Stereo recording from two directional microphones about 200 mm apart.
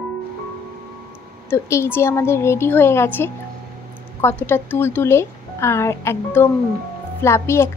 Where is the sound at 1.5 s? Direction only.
10° left (ahead or behind).